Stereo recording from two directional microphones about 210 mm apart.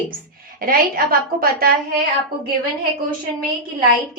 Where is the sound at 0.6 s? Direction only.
45° right (ahead or behind).